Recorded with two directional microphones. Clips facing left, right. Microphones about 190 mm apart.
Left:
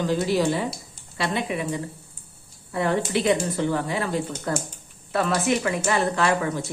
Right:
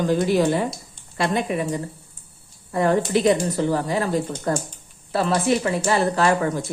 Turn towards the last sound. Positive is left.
turn(degrees=-40)  # may be behind; listen again after turning